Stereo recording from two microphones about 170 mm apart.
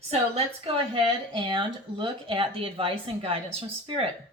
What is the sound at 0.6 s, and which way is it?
Speech, 30° right (ahead or behind).